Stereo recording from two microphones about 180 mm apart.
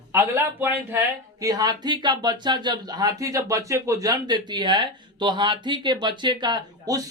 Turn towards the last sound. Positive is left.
turn(degrees=-20)  # may be behind; listen again after turning